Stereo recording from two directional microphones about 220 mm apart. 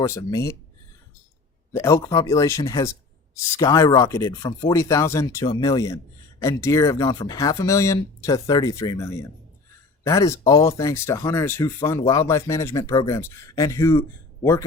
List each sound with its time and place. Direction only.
0.0 s speech: 15° left (ahead or behind)
1.7 s speech: 15° left (ahead or behind)